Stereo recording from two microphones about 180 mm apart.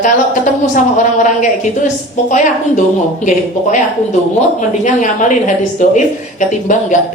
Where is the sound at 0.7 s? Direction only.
45° left (ahead or behind).